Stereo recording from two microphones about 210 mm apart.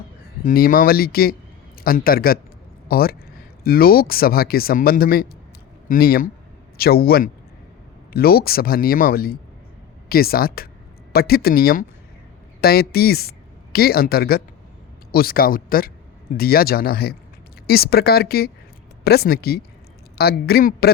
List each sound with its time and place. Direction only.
0.4 s speech: 45° left (ahead or behind)